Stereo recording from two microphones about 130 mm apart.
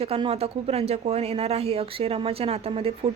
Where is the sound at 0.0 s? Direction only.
45° right (ahead or behind).